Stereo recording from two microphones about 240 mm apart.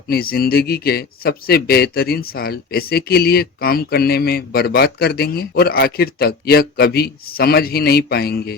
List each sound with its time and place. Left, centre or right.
0.1 s speech: left